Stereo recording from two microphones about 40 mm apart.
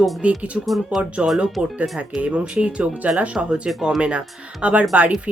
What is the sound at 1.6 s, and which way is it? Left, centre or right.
Speech, right.